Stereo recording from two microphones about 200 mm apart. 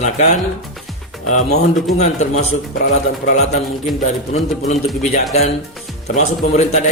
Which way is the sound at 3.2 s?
50° left (ahead or behind).